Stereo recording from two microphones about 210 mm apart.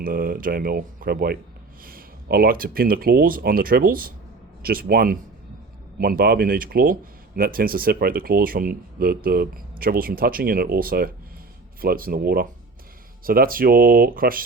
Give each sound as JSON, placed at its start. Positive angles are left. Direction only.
{"t": 0.0, "sound": "speech", "side_deg": -45}